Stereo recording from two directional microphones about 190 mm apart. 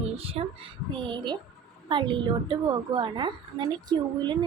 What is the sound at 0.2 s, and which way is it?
A woman's voice, 30° right (ahead or behind).